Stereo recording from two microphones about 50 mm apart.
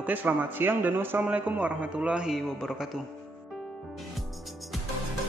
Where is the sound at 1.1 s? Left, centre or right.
Right.